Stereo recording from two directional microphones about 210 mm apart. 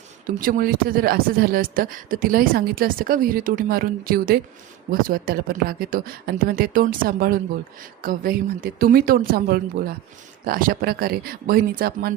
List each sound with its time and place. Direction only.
0.3 s speech: 40° right (ahead or behind)